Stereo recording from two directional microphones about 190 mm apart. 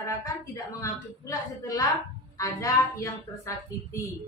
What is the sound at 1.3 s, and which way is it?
Music, 15° left (ahead or behind).